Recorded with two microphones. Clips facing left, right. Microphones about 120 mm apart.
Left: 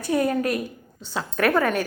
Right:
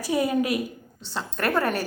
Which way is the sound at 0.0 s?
10° right (ahead or behind).